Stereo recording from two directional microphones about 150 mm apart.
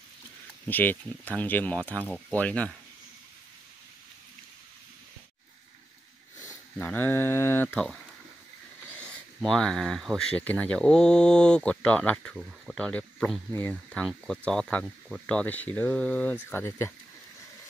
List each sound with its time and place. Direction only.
0.7 s speech: 10° left (ahead or behind)
6.8 s speech: 10° left (ahead or behind)
9.0 s speech: 5° left (ahead or behind)